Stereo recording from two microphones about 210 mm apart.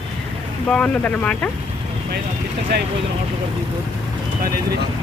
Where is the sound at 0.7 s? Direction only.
5° left (ahead or behind).